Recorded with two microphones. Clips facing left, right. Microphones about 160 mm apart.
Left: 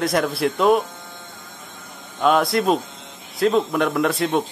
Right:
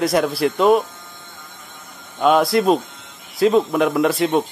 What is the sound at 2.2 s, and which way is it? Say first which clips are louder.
Speech: right 3 dB; centre (ahead or behind).